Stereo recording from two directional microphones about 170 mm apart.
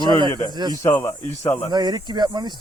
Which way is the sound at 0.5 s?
25° right (ahead or behind).